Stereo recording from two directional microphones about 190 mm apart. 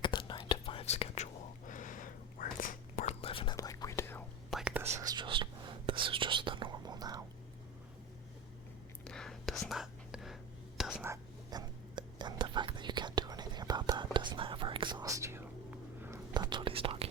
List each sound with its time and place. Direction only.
0.0 s whispering: 25° left (ahead or behind)
4.5 s whispering: 5° right (ahead or behind)
4.9 s whispering: 20° right (ahead or behind)
9.0 s whispering: 5° left (ahead or behind); by 17.1 s 30° right (ahead or behind)